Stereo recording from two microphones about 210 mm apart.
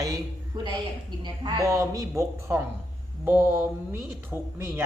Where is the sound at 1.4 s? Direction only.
15° right (ahead or behind).